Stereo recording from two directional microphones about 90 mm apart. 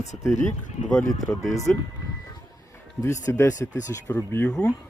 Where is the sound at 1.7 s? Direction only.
15° left (ahead or behind).